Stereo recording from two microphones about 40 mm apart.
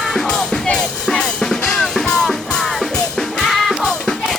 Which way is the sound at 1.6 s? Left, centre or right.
Centre.